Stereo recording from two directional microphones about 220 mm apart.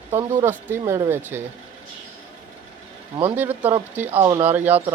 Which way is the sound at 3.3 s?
10° right (ahead or behind).